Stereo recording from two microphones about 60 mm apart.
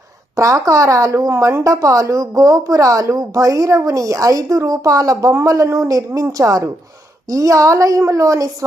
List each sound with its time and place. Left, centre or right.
0.3 s a woman's voice: right